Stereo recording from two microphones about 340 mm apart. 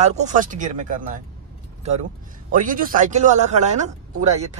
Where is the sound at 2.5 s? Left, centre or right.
Right.